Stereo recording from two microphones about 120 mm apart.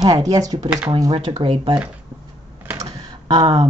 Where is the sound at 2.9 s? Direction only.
40° right (ahead or behind).